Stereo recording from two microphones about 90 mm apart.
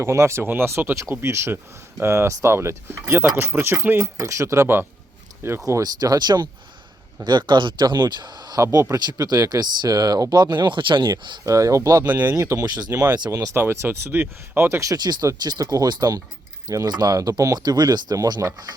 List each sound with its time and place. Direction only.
0.0 s speech: 30° right (ahead or behind)
5.6 s speech: 40° right (ahead or behind)
8.6 s speech: 35° right (ahead or behind)
9.0 s speech: 50° right (ahead or behind)
11.4 s speech: 35° right (ahead or behind)
13.6 s speech: 25° right (ahead or behind)
14.9 s speech: 50° right (ahead or behind)